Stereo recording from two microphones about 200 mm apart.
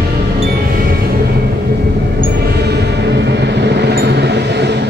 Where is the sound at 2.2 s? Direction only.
50° right (ahead or behind).